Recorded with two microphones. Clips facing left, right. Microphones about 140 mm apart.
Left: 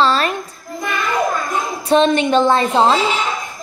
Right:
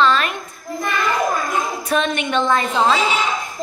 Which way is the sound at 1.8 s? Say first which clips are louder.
Left 12 dB; 30° left (ahead or behind).